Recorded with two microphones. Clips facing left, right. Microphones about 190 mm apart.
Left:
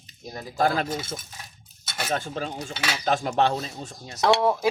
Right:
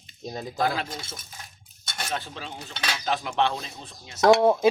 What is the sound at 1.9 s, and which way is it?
Cutlery, 5° left (ahead or behind).